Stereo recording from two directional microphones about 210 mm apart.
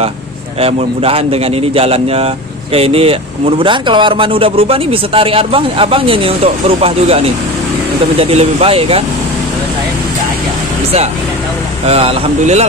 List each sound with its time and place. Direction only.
0.6 s a man's voice: 30° right (ahead or behind)
11.8 s a man's voice: 30° right (ahead or behind)